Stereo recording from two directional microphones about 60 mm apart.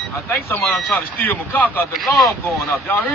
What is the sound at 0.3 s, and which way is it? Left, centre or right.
A man's voice, left.